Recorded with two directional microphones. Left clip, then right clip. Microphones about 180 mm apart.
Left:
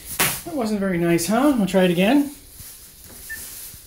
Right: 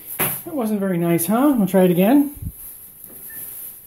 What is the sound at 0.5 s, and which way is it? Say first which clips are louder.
Speech: right 2 dB; 15° right (ahead or behind).